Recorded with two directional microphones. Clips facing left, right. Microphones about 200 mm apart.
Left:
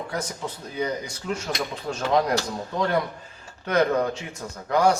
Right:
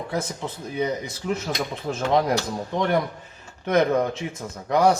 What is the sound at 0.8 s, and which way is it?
Speech, 20° right (ahead or behind).